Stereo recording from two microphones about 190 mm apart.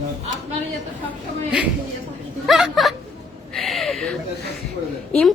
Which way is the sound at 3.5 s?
Centre (ahead or behind).